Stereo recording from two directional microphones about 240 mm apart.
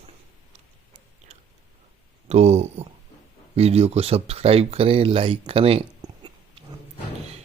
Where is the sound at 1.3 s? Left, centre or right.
Right.